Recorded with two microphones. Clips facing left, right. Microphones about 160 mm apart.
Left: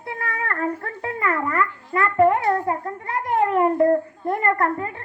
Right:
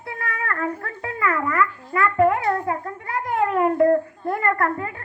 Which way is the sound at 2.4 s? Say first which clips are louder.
Left 1 dB; 35° left (ahead or behind).